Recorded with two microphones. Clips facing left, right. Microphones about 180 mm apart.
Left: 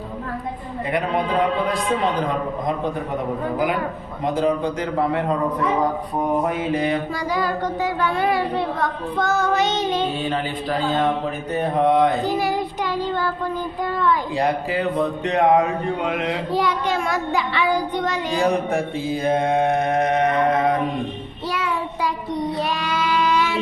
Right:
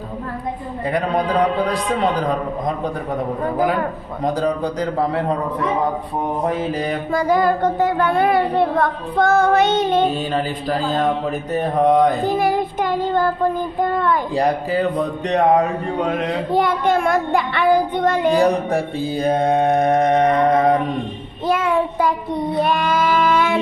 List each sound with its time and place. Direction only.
0.9 s mantra: 40° right (ahead or behind)
4.2 s mantra: 35° right (ahead or behind)
7.1 s speech: 50° right (ahead or behind)
10.2 s mantra: 40° right (ahead or behind)
11.9 s child singing: 45° right (ahead or behind)
16.0 s speech: 50° right (ahead or behind)
18.3 s mantra: 35° right (ahead or behind)
21.4 s child singing: 50° right (ahead or behind)